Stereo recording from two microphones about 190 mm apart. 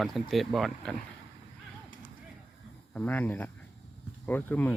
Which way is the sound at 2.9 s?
10° left (ahead or behind).